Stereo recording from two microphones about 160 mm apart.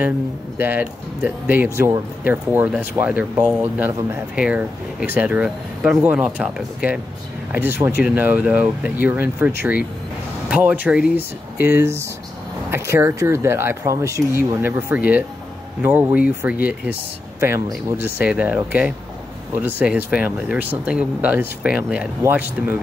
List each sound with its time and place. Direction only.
0.6 s speech: 10° right (ahead or behind)
10.5 s speech: 10° right (ahead or behind)